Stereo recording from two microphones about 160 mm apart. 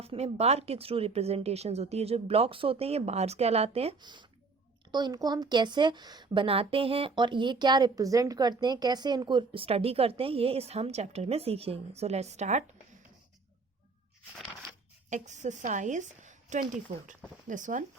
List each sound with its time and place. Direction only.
0.0 s a woman's voice: 40° right (ahead or behind)
3.9 s a woman's voice: 30° right (ahead or behind); by 12.6 s 45° right (ahead or behind)
15.1 s a woman's voice: 50° right (ahead or behind)